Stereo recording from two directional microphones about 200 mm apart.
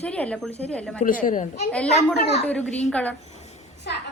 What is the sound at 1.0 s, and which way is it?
Speech, 40° left (ahead or behind).